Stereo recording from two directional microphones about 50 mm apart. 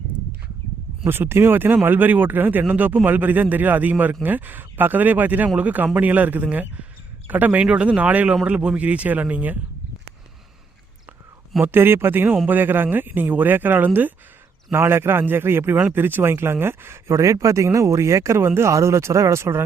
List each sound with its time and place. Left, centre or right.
1.0 s speech: right
7.6 s speech: right
11.6 s speech: right
14.7 s speech: right